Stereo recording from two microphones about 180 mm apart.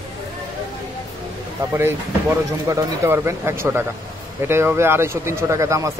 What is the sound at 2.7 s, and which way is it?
Speech, 15° right (ahead or behind).